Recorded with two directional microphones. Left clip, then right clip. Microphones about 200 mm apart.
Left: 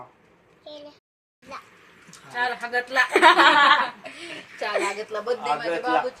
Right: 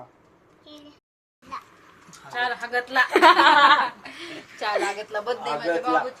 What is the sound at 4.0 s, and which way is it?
A woman's voice, 25° right (ahead or behind).